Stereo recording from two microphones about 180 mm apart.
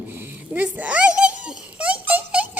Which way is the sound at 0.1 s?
10° right (ahead or behind).